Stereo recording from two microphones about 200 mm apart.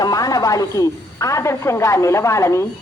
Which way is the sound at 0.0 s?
20° left (ahead or behind).